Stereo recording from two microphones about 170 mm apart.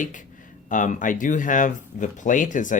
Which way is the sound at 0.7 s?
50° left (ahead or behind).